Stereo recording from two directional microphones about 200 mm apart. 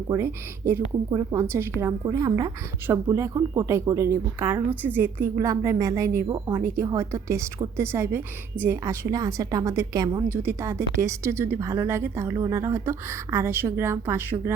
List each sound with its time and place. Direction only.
0.1 s a woman's voice: 15° right (ahead or behind)